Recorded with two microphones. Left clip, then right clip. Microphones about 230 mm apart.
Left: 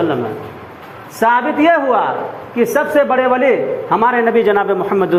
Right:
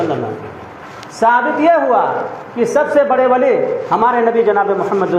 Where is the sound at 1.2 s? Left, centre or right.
Left.